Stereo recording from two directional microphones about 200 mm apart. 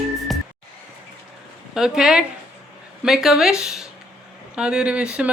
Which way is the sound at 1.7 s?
5° right (ahead or behind).